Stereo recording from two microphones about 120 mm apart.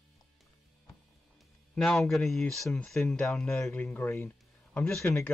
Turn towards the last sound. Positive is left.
turn(degrees=25)  # may be behind; listen again after turning